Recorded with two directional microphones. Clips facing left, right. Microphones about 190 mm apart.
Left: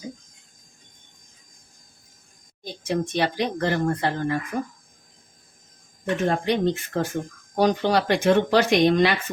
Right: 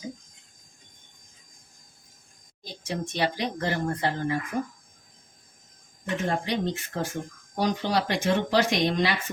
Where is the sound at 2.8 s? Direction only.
55° left (ahead or behind).